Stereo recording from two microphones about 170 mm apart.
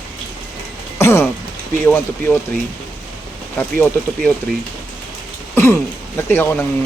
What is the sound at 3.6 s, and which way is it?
Speech, 10° left (ahead or behind).